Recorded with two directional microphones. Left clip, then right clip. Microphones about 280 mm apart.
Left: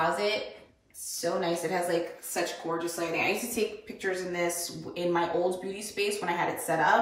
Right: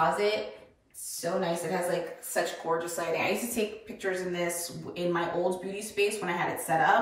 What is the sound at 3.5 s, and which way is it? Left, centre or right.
A woman's voice, centre.